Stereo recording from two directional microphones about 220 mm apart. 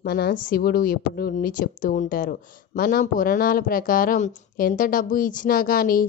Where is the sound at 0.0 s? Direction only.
45° left (ahead or behind).